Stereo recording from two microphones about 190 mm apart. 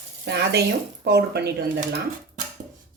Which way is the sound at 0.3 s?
60° right (ahead or behind).